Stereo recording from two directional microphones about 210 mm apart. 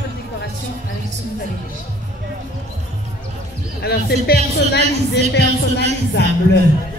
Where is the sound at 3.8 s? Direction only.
50° left (ahead or behind).